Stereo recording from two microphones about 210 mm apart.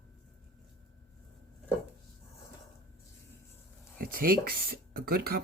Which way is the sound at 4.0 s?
45° right (ahead or behind).